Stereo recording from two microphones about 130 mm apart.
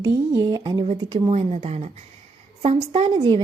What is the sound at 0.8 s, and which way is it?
Speech, 50° right (ahead or behind).